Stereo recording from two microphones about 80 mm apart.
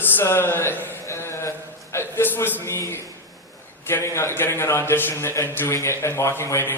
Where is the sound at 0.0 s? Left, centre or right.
Left.